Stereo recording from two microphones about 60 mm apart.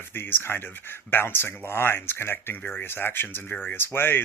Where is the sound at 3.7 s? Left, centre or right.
Left.